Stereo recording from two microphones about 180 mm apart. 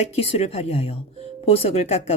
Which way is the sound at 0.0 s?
35° left (ahead or behind).